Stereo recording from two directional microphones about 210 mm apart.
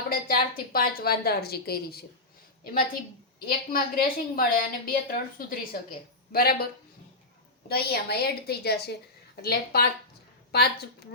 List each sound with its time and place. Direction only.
0.1 s a woman's voice: 45° left (ahead or behind)
3.4 s a woman's voice: 45° left (ahead or behind)
7.7 s a woman's voice: 50° left (ahead or behind)